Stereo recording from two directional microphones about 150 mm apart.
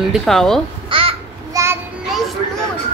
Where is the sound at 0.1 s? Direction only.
Centre (ahead or behind).